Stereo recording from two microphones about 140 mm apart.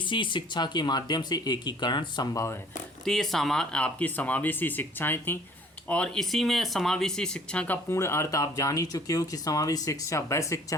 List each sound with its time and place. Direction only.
0.0 s speech: 35° left (ahead or behind)
3.0 s speech: 5° left (ahead or behind)
5.9 s speech: 5° left (ahead or behind); by 10.8 s 20° left (ahead or behind)